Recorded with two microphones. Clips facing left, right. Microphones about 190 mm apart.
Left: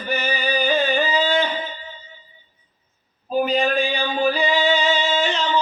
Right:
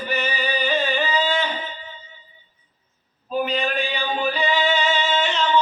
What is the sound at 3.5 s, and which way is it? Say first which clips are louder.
Speech: left 4 dB; 40° left (ahead or behind).